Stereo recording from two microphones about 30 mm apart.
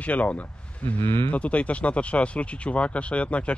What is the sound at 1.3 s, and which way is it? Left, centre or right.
Speech, left.